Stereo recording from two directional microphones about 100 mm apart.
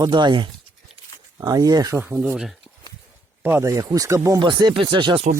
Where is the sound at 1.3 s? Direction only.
35° right (ahead or behind).